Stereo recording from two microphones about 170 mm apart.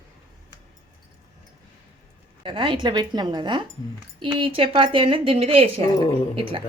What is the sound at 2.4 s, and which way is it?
Speech, 30° right (ahead or behind).